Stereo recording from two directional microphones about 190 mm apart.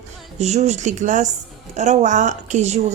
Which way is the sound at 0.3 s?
35° right (ahead or behind).